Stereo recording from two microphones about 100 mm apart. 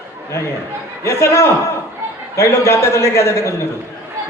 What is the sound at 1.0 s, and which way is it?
A man's voice, 30° left (ahead or behind).